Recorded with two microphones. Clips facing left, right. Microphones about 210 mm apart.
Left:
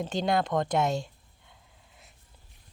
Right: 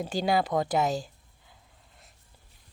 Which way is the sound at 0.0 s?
5° right (ahead or behind).